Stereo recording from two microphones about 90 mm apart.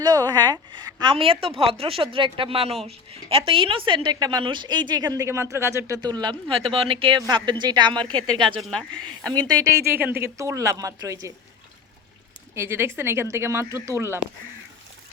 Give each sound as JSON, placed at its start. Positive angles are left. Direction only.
{"t": 0.0, "sound": "a woman's voice", "side_deg": -50}
{"t": 1.1, "sound": "a woman's voice", "side_deg": -90}
{"t": 5.1, "sound": "a woman's voice", "side_deg": -35}
{"t": 6.0, "sound": "a woman's voice", "side_deg": -50}
{"t": 6.5, "sound": "speech", "side_deg": -90}
{"t": 7.3, "sound": "a woman's voice", "side_deg": -55}
{"t": 9.3, "sound": "a woman's voice", "side_deg": -45}
{"t": 10.0, "sound": "speech", "side_deg": -25}
{"t": 10.4, "sound": "a woman's voice", "side_deg": -35}
{"t": 12.5, "sound": "speech", "side_deg": -25}